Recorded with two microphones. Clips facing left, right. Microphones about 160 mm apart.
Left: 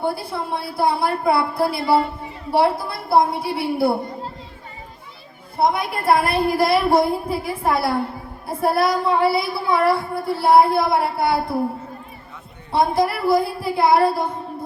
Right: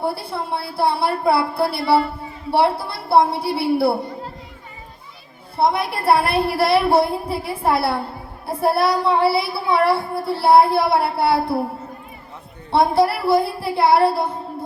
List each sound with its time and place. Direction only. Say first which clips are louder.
0.0 s speech: even; 30° right (ahead or behind)
5.5 s speech: right 1 dB; 30° right (ahead or behind)
12.7 s speech: right 2 dB; 30° right (ahead or behind)